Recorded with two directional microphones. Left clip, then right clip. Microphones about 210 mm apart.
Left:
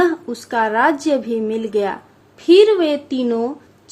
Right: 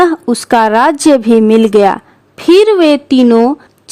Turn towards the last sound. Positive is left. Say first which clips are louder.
# right 12 dB
turn(degrees=-50)  # may be behind; listen again after turning